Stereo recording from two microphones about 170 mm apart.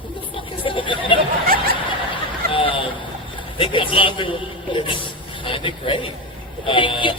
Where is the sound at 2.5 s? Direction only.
30° left (ahead or behind).